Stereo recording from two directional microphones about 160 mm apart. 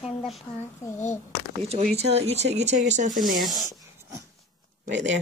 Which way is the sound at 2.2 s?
40° right (ahead or behind).